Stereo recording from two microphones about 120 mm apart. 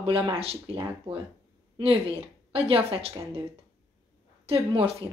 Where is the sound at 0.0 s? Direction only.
50° right (ahead or behind).